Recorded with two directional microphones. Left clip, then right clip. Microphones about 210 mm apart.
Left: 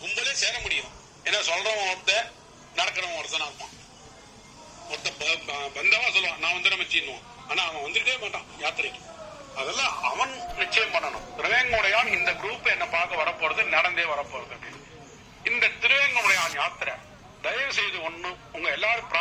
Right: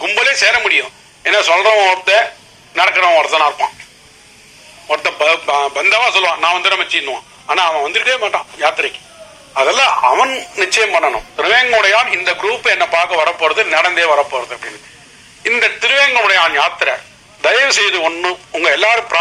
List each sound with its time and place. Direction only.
0.0 s radio: 45° right (ahead or behind)
1.5 s speech: 90° right
2.7 s speech: 45° right (ahead or behind)
4.9 s speech: 45° right (ahead or behind)